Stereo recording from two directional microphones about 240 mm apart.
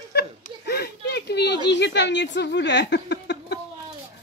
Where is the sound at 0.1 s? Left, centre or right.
Left.